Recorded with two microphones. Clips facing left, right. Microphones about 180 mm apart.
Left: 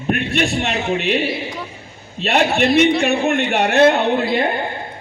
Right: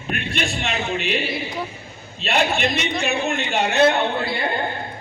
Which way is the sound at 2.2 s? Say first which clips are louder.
Left 4 dB; 65° left (ahead or behind).